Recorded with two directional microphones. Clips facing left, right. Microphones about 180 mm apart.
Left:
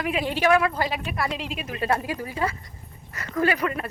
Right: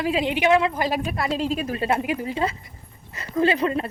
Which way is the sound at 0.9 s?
40° right (ahead or behind).